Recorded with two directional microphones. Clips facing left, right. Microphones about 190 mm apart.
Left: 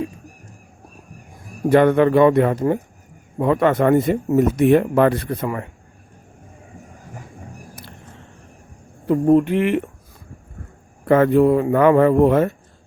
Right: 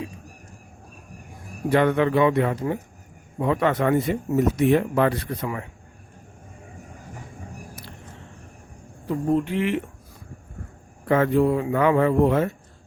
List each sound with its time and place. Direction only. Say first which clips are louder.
1.7 s speech: left 6 dB; 50° left (ahead or behind)
9.2 s speech: left 7 dB; 60° left (ahead or behind)
11.1 s speech: left 6 dB; 55° left (ahead or behind)